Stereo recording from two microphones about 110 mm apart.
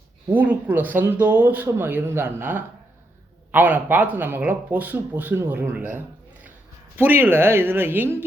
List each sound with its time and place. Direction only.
0.3 s speech: 15° right (ahead or behind)